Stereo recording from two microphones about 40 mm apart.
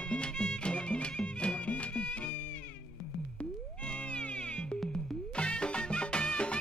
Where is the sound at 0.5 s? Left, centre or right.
Left.